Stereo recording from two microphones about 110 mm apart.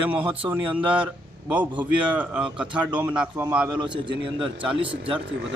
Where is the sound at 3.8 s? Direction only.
45° right (ahead or behind).